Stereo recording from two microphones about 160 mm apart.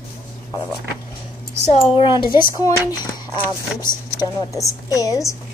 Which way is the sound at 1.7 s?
35° left (ahead or behind).